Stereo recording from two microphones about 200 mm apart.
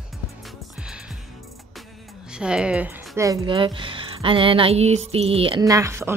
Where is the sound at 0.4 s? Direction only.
Centre (ahead or behind).